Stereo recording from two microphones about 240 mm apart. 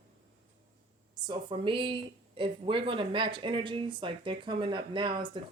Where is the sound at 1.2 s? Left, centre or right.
Centre.